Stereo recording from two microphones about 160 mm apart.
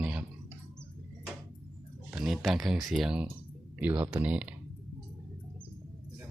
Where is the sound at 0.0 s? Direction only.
10° right (ahead or behind).